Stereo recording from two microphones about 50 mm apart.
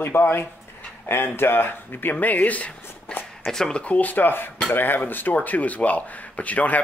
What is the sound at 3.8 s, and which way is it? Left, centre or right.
Speech, left.